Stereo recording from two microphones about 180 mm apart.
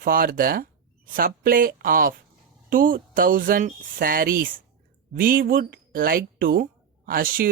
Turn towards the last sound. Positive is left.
turn(degrees=-55)  # may be behind; listen again after turning